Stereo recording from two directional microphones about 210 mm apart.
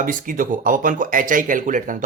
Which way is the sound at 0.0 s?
40° right (ahead or behind).